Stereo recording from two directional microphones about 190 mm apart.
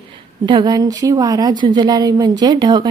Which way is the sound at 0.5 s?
20° right (ahead or behind).